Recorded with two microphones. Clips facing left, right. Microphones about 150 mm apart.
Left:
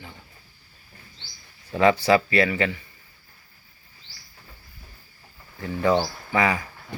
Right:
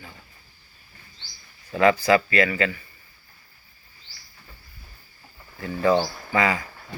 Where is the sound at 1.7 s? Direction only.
25° left (ahead or behind).